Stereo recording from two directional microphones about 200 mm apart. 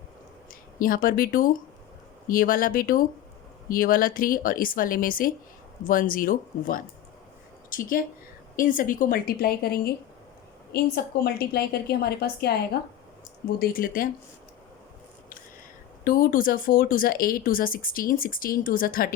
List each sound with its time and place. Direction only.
0.8 s a woman's voice: 45° left (ahead or behind)
13.6 s speech: 45° left (ahead or behind)
16.0 s speech: 45° left (ahead or behind)